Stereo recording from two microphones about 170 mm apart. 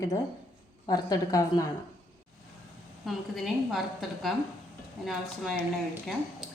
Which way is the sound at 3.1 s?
Centre (ahead or behind).